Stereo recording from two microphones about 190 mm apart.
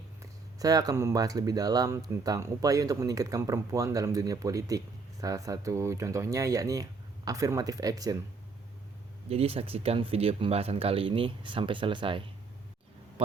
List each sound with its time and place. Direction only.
0.2 s speech: 20° right (ahead or behind)
9.3 s speech: 30° right (ahead or behind)